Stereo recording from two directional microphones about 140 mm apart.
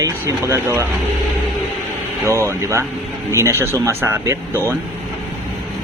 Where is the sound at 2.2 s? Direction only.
20° right (ahead or behind).